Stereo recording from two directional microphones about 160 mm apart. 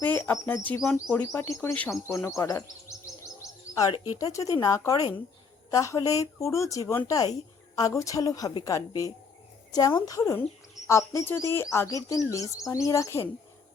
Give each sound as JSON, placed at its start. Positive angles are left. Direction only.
{"t": 0.0, "sound": "speech", "side_deg": 10}
{"t": 3.4, "sound": "bird", "side_deg": 20}
{"t": 3.9, "sound": "speech", "side_deg": 20}